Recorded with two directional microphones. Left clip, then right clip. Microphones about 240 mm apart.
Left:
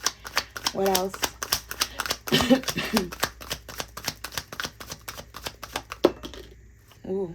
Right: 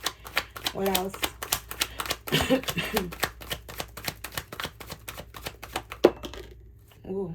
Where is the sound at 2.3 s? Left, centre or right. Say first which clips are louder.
Left 3 dB; left.